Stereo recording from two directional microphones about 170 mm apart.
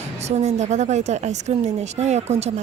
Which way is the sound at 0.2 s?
40° right (ahead or behind).